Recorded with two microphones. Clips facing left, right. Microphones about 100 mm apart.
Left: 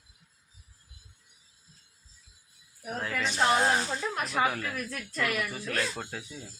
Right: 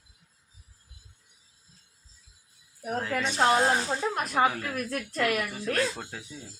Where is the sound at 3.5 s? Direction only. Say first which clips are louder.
Right 1 dB; 10° right (ahead or behind).